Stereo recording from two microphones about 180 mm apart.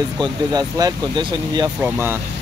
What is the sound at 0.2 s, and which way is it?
Speech, 20° right (ahead or behind).